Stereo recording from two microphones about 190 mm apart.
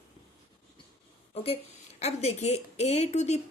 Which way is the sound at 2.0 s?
35° left (ahead or behind).